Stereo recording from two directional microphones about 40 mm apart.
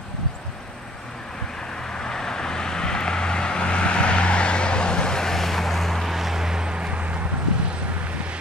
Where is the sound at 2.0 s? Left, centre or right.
Centre; by 8.3 s right.